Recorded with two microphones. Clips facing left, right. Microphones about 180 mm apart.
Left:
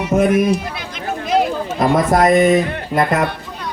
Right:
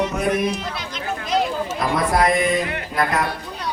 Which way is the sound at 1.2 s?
50° left (ahead or behind).